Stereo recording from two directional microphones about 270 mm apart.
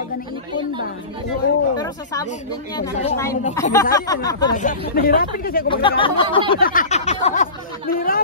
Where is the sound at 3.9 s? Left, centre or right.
Centre.